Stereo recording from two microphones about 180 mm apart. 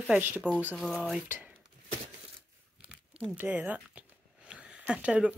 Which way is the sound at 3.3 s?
10° right (ahead or behind).